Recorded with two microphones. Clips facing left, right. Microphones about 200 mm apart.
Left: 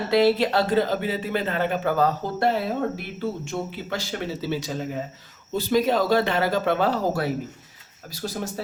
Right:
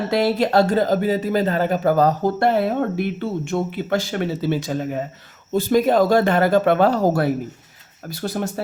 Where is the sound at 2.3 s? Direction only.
60° right (ahead or behind).